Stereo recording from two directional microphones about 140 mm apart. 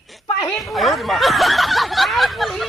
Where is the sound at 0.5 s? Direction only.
Centre (ahead or behind).